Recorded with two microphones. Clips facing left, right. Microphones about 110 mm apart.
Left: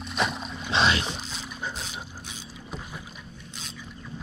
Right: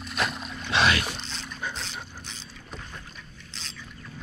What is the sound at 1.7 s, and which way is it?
Boat, 10° left (ahead or behind).